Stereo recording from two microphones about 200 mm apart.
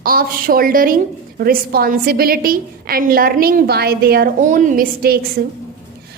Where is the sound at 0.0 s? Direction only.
45° right (ahead or behind).